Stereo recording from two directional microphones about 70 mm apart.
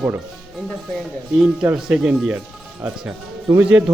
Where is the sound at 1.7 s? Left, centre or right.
Centre.